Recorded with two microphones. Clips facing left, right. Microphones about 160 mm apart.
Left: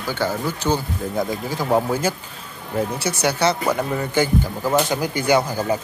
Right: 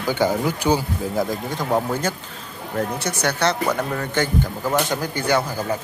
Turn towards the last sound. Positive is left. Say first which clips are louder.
# left 3 dB
turn(degrees=10)  # may be behind; listen again after turning